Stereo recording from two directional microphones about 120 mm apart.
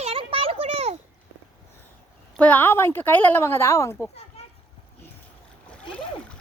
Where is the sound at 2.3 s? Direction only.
10° left (ahead or behind).